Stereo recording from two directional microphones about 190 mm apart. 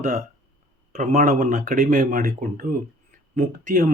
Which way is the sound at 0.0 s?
40° right (ahead or behind).